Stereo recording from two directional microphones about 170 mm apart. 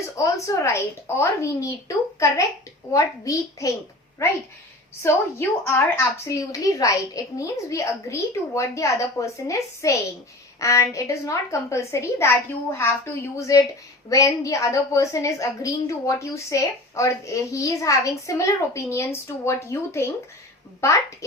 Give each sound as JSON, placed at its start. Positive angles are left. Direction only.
{"t": 0.0, "sound": "a woman's voice", "side_deg": 20}